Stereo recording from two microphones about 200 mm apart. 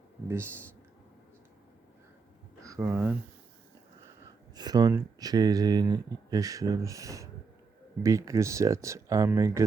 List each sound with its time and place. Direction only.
2.6 s speech: 15° right (ahead or behind)
4.5 s speech: 20° right (ahead or behind)